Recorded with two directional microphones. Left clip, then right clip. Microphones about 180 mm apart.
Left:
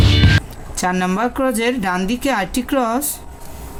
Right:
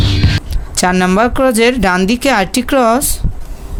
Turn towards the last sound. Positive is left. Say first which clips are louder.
# right 7 dB
turn(degrees=-55)  # may be behind; listen again after turning